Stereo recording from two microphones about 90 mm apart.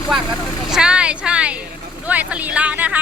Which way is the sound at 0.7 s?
10° right (ahead or behind).